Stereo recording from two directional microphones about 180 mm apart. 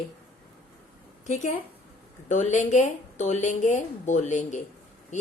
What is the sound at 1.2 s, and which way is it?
A woman's voice, 40° left (ahead or behind).